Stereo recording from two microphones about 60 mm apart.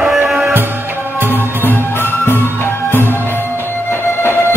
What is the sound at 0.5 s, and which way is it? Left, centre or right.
Music, right.